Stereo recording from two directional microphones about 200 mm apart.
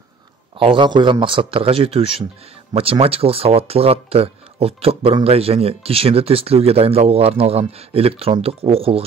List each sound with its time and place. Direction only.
0.6 s speech: 25° right (ahead or behind)